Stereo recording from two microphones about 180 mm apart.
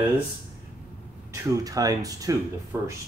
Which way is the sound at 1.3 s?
15° right (ahead or behind).